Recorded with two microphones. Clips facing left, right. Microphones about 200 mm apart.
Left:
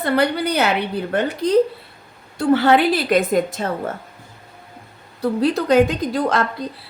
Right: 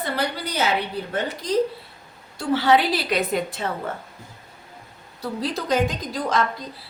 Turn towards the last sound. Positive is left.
turn(degrees=60)  # may be behind; listen again after turning